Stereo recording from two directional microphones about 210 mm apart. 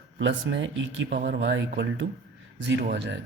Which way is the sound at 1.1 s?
50° right (ahead or behind).